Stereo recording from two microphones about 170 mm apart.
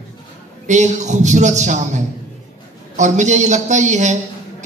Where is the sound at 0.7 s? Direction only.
45° right (ahead or behind).